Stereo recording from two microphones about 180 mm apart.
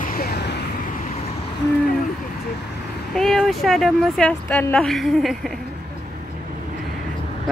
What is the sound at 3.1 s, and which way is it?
Speech, centre (ahead or behind).